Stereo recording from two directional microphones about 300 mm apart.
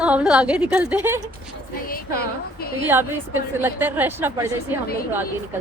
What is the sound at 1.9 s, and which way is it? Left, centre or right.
Speech, left.